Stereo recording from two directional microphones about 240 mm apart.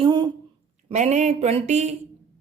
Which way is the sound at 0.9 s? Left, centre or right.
Right.